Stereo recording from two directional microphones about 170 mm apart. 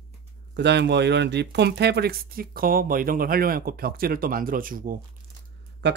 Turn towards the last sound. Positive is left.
turn(degrees=-90)